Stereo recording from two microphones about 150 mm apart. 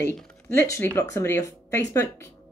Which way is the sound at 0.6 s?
15° left (ahead or behind).